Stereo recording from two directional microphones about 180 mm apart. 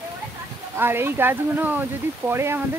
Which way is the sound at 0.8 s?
10° right (ahead or behind).